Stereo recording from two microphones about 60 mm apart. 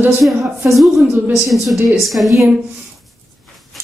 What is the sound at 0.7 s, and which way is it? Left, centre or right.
A woman's voice, centre.